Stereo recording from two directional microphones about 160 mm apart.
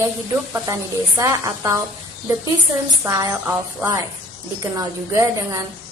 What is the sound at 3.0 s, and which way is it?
Speech, 20° right (ahead or behind).